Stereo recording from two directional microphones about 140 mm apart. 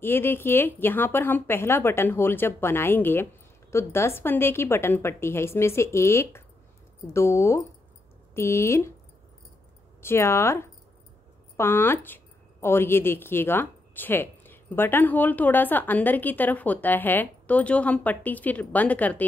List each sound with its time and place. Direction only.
0.0 s speech: 15° left (ahead or behind)
10.0 s speech: 20° left (ahead or behind)